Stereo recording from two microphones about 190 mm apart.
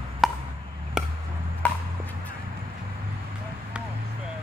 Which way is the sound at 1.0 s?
5° right (ahead or behind).